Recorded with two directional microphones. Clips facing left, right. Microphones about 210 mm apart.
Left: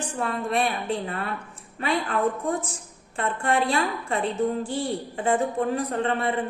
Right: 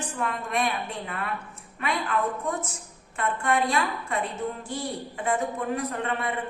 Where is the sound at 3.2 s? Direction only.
30° left (ahead or behind).